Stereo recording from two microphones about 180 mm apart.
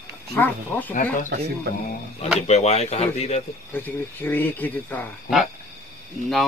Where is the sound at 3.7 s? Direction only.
10° left (ahead or behind).